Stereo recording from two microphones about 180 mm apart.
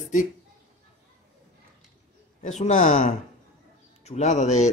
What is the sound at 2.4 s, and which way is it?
Speech, 40° left (ahead or behind).